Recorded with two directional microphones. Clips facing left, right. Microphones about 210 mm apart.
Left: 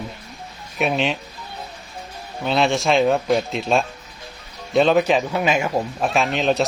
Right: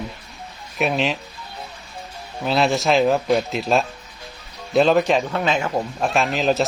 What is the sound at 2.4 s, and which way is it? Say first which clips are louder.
Speech: even; centre (ahead or behind).